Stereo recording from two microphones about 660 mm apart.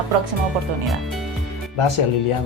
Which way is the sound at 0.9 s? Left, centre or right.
Centre.